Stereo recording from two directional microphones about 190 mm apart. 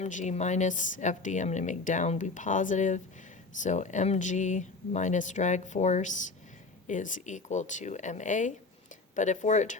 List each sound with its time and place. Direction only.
0.0 s speech: 40° left (ahead or behind)